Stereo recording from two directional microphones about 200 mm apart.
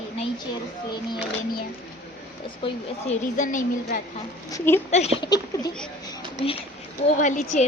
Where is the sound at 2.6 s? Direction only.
35° left (ahead or behind).